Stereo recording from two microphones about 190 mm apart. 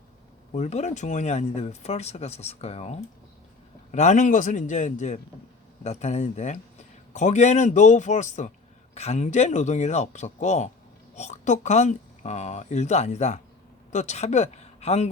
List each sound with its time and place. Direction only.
0.5 s speech: 35° left (ahead or behind)
3.9 s speech: 35° left (ahead or behind)